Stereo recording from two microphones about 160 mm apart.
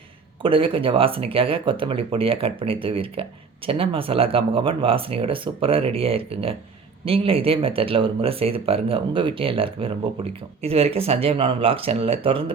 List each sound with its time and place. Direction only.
0.4 s speech: 35° right (ahead or behind)